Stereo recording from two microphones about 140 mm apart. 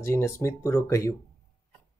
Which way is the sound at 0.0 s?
20° left (ahead or behind).